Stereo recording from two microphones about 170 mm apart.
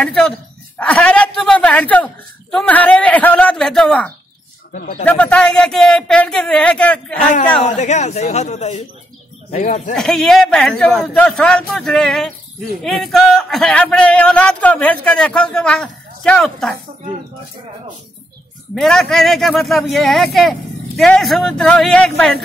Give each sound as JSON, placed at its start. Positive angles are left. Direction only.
{"t": 0.0, "sound": "a man's voice", "side_deg": 5}
{"t": 7.7, "sound": "a man's voice", "side_deg": 45}
{"t": 9.9, "sound": "a man's voice", "side_deg": 5}
{"t": 18.8, "sound": "a man's voice", "side_deg": 5}